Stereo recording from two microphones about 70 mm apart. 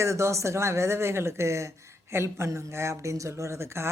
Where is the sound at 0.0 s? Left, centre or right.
Right.